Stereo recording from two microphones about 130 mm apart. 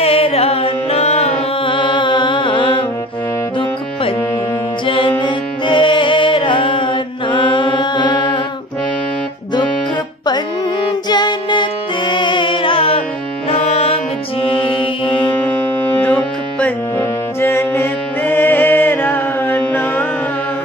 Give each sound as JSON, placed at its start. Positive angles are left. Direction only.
{"t": 0.0, "sound": "music", "side_deg": 50}
{"t": 1.6, "sound": "music", "side_deg": 40}
{"t": 4.8, "sound": "music", "side_deg": 40}
{"t": 10.9, "sound": "music", "side_deg": 35}
{"t": 14.4, "sound": "music", "side_deg": 45}
{"t": 15.3, "sound": "music", "side_deg": 10}